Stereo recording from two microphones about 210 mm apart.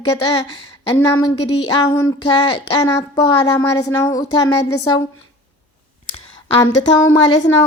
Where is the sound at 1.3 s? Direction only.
90° left.